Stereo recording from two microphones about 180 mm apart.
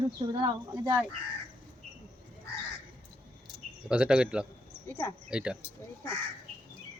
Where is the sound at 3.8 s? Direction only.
5° right (ahead or behind).